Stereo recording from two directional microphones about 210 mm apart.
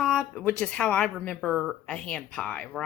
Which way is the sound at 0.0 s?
5° left (ahead or behind).